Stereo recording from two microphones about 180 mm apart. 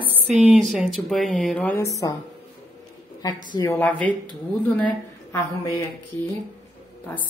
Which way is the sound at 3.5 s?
20° left (ahead or behind).